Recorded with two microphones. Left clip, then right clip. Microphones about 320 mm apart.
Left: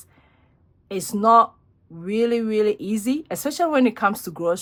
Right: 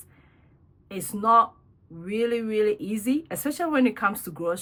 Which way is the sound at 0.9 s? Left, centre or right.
Centre.